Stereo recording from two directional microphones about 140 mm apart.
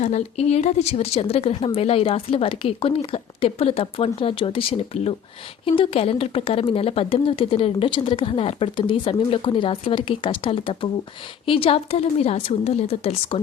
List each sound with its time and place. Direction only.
0.0 s a woman's voice: 50° left (ahead or behind)